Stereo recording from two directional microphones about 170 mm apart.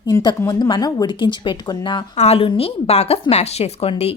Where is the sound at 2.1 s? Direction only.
40° left (ahead or behind).